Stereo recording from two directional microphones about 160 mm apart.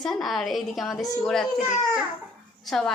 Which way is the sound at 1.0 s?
25° left (ahead or behind).